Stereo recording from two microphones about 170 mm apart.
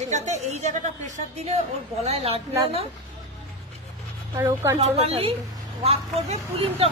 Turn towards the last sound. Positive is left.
turn(degrees=-35)  # may be behind; listen again after turning